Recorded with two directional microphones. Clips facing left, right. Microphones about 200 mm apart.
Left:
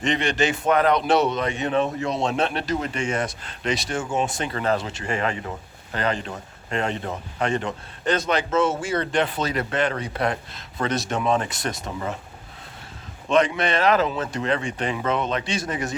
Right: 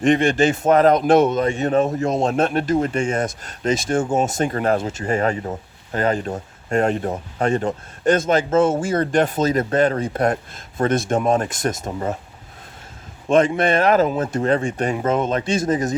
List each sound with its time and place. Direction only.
0.0 s speech: 50° right (ahead or behind)
13.2 s speech: 50° right (ahead or behind)